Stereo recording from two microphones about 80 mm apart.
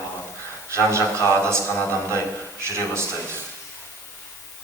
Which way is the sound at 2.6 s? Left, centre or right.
Right.